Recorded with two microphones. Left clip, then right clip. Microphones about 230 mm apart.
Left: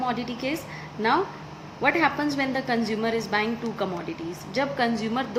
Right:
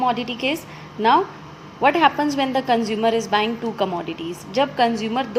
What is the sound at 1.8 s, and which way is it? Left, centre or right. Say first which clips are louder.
A woman's voice: right 6 dB; centre.